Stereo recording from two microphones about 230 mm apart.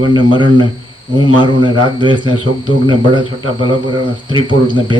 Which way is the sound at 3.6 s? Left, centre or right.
Centre.